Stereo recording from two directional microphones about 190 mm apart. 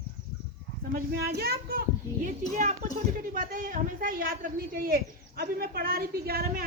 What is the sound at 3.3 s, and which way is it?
Speech, 45° right (ahead or behind).